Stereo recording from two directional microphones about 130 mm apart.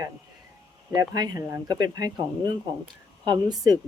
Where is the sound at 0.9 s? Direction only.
30° right (ahead or behind).